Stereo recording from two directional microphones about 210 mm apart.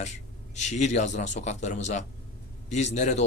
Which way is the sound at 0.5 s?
35° left (ahead or behind).